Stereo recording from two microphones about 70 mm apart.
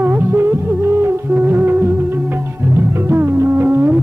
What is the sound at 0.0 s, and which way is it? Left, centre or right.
Music, right.